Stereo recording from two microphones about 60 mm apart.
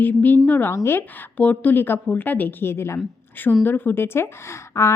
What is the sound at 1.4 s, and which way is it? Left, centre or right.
A woman's voice, left.